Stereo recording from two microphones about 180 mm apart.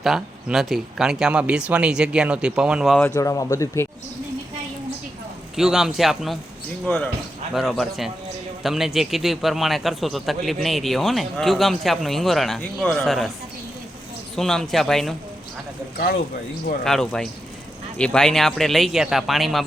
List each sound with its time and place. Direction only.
0.0 s a man's voice: centre (ahead or behind)
3.2 s speech: 15° left (ahead or behind)
5.5 s a man's voice: 5° right (ahead or behind)
14.3 s a man's voice: 5° left (ahead or behind)
16.8 s a man's voice: 5° left (ahead or behind)